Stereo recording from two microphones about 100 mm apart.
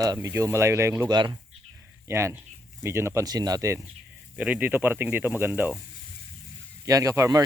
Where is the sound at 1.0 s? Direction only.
45° right (ahead or behind).